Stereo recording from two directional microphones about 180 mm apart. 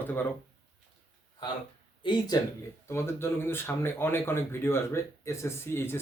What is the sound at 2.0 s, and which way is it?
Speech, 25° left (ahead or behind).